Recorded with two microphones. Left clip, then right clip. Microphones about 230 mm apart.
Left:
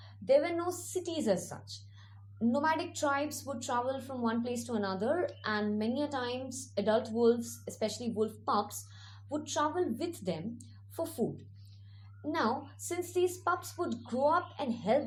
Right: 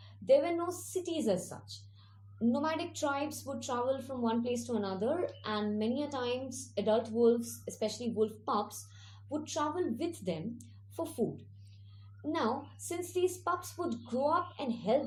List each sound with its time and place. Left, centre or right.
0.3 s a woman's voice: left
12.2 s a woman's voice: left